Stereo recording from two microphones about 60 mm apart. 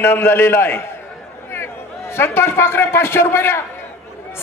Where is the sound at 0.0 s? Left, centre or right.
Left.